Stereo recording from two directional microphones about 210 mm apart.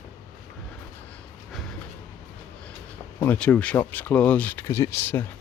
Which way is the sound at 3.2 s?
5° left (ahead or behind).